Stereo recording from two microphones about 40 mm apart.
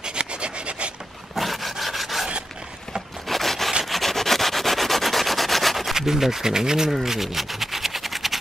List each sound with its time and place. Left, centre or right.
0.0 s rub: right
1.3 s dog: centre
3.3 s wood: centre
3.8 s rub: centre
5.9 s speech: centre
6.9 s a sound: centre